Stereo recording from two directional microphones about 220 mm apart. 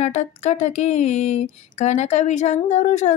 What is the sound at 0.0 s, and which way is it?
Speech, 30° left (ahead or behind).